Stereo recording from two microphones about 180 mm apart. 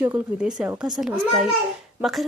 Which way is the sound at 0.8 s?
20° right (ahead or behind).